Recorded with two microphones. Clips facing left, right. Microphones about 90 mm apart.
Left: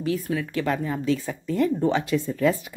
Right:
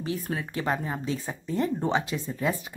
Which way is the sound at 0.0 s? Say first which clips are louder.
Left 5 dB; 25° right (ahead or behind).